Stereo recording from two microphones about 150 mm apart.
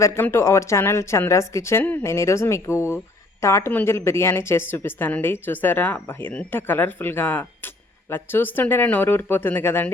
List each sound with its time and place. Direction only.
0.0 s a woman's voice: 15° left (ahead or behind)